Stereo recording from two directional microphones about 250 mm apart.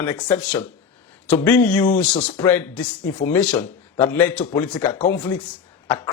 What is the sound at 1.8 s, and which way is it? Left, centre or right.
Speech, left.